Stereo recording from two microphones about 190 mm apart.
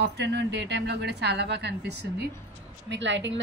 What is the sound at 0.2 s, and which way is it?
A woman's voice, 70° right (ahead or behind).